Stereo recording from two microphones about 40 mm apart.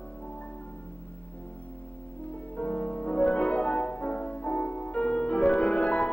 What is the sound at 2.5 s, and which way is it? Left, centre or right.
Music, left.